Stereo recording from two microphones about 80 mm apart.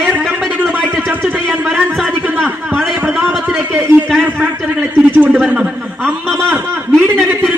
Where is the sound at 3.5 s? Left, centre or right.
Centre.